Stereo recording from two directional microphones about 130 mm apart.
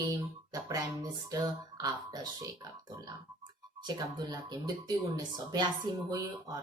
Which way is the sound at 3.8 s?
35° right (ahead or behind).